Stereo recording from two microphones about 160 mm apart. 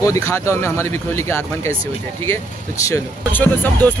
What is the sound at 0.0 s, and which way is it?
Speech, 20° left (ahead or behind).